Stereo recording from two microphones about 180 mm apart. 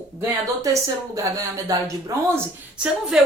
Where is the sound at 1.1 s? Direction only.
20° right (ahead or behind).